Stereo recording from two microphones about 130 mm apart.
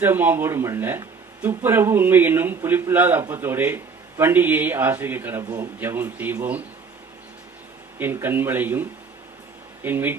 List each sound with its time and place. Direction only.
0.0 s speech: 15° right (ahead or behind)
7.9 s speech: 15° right (ahead or behind)